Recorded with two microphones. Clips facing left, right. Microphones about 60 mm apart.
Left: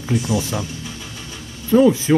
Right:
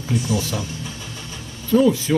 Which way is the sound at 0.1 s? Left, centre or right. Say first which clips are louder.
Left 2 dB; centre.